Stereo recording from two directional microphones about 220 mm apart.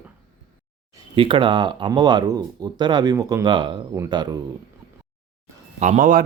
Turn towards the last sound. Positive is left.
turn(degrees=-40)  # may be behind; listen again after turning